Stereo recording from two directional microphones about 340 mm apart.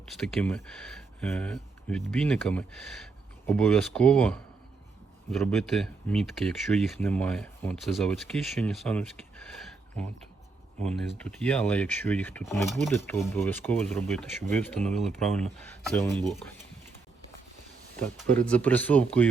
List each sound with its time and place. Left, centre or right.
0.1 s speech: centre
11.2 s speech: centre
18.0 s speech: centre